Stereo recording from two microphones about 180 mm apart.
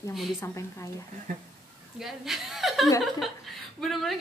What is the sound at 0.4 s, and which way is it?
Speech, 15° left (ahead or behind).